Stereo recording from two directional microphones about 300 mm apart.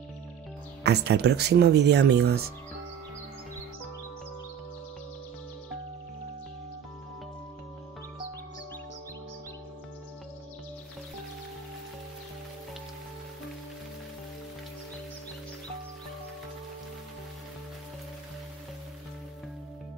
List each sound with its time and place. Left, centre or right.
0.8 s speech: right